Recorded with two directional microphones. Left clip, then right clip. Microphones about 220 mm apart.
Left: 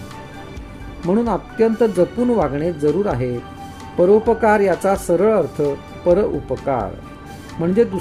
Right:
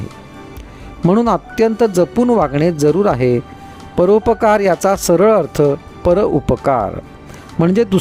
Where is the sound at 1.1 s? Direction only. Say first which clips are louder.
Right 5 dB; 50° right (ahead or behind).